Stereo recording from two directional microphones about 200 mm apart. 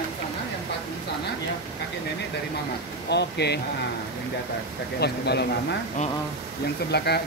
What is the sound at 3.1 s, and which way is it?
Speech, 55° left (ahead or behind).